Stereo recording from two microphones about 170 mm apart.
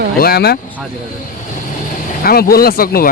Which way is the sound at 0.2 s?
65° left (ahead or behind).